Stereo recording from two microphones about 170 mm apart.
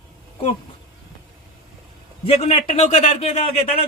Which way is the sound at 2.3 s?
35° left (ahead or behind).